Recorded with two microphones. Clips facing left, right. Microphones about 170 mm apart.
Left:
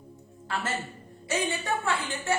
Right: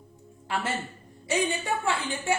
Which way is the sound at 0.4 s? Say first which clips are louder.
Right 2 dB; 10° right (ahead or behind).